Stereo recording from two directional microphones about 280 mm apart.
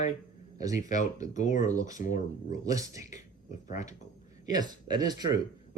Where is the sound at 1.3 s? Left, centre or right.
Left.